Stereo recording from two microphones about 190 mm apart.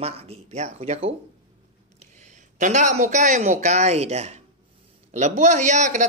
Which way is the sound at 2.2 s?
40° right (ahead or behind).